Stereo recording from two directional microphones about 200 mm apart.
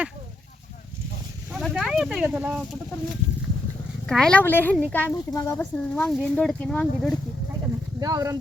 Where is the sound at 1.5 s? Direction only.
Centre (ahead or behind).